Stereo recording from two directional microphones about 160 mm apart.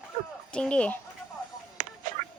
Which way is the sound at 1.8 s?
55° right (ahead or behind).